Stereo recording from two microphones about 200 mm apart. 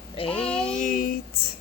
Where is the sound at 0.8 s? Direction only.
45° left (ahead or behind).